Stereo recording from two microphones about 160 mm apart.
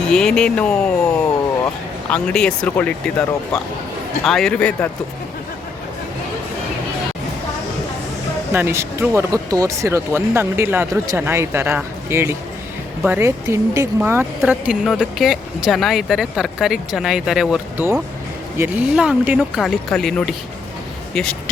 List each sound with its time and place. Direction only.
0.1 s speech: 5° left (ahead or behind)
8.5 s speech: 15° right (ahead or behind); by 21.5 s 5° left (ahead or behind)